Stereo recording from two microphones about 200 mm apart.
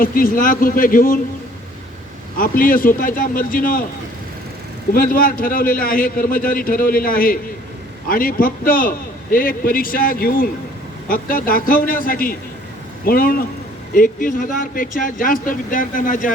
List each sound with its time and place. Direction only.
0.0 s a man's voice: 45° left (ahead or behind)
2.4 s a man's voice: 45° left (ahead or behind)
4.9 s a man's voice: 45° left (ahead or behind)